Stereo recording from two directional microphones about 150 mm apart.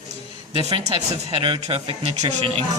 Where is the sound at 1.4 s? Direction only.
35° right (ahead or behind).